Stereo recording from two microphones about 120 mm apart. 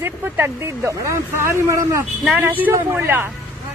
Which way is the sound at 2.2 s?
10° right (ahead or behind).